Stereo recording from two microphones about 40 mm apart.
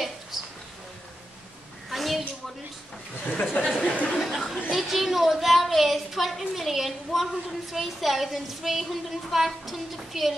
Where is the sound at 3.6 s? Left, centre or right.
Left.